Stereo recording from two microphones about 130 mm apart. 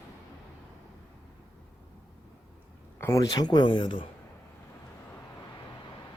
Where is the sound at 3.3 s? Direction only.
30° left (ahead or behind).